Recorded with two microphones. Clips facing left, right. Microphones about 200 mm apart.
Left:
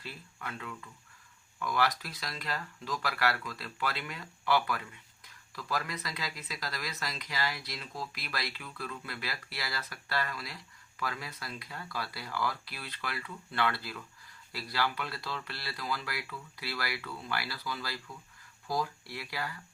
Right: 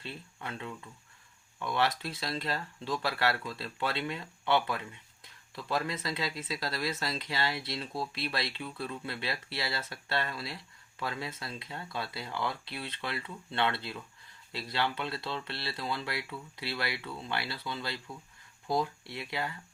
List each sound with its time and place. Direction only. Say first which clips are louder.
0.0 s speech: right 2 dB; 25° right (ahead or behind)